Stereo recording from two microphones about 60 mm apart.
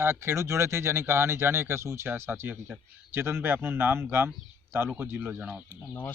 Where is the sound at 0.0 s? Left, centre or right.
Right.